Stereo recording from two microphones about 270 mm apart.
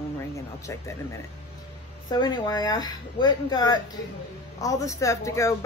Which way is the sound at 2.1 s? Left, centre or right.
Centre.